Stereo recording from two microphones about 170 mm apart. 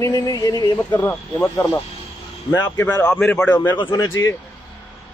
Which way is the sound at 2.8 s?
20° left (ahead or behind).